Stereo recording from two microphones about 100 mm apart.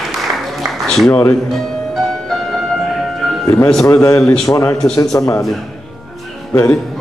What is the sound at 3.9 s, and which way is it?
A man's voice, 30° left (ahead or behind).